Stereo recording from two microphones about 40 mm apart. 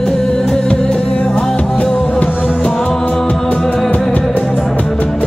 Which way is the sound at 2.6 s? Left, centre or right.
Centre.